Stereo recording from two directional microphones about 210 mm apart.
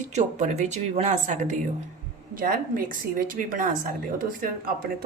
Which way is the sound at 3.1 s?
40° right (ahead or behind).